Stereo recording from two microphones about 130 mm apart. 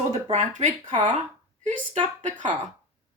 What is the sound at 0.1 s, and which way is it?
Speech, 60° right (ahead or behind).